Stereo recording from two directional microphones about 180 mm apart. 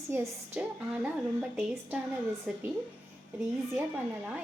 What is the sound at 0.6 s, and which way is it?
Speech, 5° right (ahead or behind).